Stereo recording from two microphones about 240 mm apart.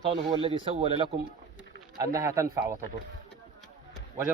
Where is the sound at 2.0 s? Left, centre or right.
Centre.